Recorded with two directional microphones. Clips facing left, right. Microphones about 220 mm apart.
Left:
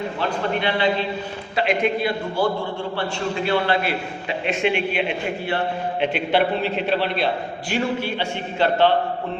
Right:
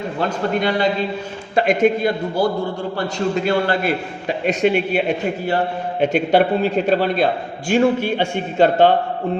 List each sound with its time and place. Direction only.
0.2 s a man's voice: 45° right (ahead or behind)